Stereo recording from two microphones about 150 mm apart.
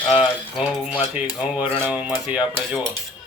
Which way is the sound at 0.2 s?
5° right (ahead or behind).